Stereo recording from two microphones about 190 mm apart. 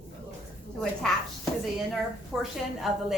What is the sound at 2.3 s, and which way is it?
Speech, 5° right (ahead or behind).